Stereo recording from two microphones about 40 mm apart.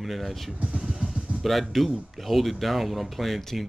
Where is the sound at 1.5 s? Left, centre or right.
Centre.